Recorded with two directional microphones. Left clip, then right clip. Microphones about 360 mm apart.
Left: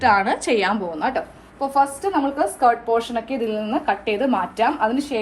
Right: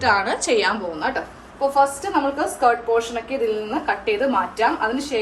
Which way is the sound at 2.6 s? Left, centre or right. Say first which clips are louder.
Even; left.